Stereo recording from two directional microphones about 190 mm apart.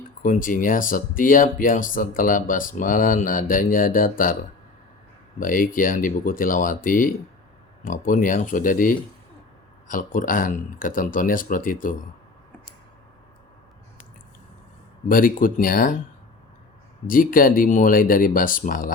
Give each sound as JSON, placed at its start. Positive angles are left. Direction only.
{"t": 0.2, "sound": "speech", "side_deg": 45}
{"t": 5.4, "sound": "speech", "side_deg": 45}
{"t": 15.0, "sound": "speech", "side_deg": 45}
{"t": 17.1, "sound": "speech", "side_deg": 45}